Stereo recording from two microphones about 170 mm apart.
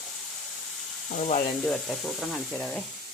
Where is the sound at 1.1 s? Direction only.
50° left (ahead or behind).